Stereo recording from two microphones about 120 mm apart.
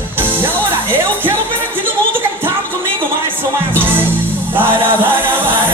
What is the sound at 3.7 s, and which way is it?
Music, 15° right (ahead or behind).